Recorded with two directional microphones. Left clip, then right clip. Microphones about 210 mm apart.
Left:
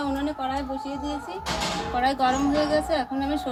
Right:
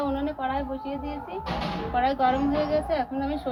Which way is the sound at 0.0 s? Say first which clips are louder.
Even; 10° left (ahead or behind).